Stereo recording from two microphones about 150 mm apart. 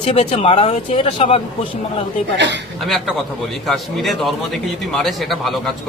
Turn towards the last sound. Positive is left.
turn(degrees=0)  # may be behind; listen again after turning